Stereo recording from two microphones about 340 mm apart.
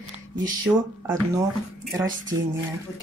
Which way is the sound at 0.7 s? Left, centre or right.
Centre.